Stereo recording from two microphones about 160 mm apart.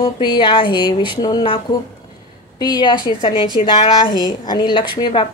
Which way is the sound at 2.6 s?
25° left (ahead or behind).